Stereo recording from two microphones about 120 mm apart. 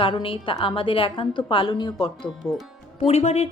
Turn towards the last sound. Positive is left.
turn(degrees=60)  # may be behind; listen again after turning